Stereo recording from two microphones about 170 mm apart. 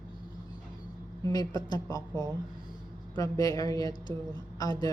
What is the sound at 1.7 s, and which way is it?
Speech, 20° left (ahead or behind).